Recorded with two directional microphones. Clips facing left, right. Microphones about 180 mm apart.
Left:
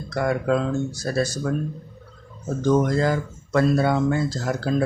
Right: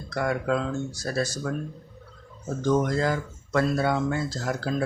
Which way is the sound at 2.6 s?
35° left (ahead or behind).